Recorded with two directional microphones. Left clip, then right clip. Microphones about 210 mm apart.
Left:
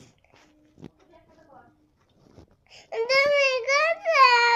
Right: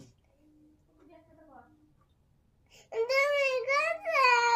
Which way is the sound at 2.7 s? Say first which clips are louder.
Left 6 dB; 30° right (ahead or behind).